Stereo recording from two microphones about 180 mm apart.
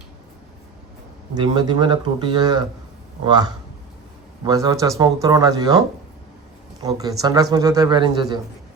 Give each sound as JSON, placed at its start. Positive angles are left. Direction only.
{"t": 1.4, "sound": "speech", "side_deg": -25}
{"t": 6.8, "sound": "speech", "side_deg": -20}